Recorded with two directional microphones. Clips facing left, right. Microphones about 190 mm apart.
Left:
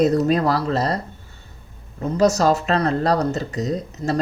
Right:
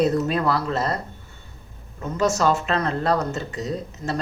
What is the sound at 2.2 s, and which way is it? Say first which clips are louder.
Speech: left 4 dB; 40° left (ahead or behind).